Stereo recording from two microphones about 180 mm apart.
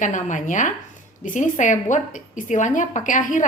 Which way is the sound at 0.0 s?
45° left (ahead or behind).